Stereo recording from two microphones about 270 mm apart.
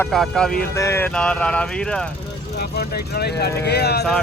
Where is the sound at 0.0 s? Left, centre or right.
Centre.